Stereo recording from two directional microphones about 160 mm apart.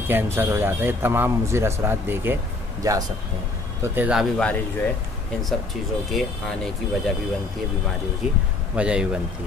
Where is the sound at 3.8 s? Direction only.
10° right (ahead or behind).